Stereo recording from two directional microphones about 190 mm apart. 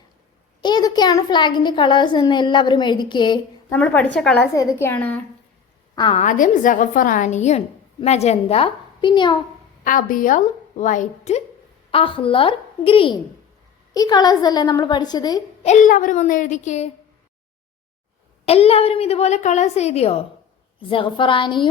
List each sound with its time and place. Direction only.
0.6 s a child's voice: 20° left (ahead or behind)
3.7 s a woman's voice: 10° left (ahead or behind)
4.5 s a woman's voice: 15° left (ahead or behind)
6.1 s a woman's voice: 45° left (ahead or behind); by 9.4 s 25° left (ahead or behind)
9.8 s a woman's voice: 45° left (ahead or behind); by 15.4 s 20° left (ahead or behind)
15.6 s a woman's voice: 40° left (ahead or behind)
18.4 s a woman's voice: 30° left (ahead or behind)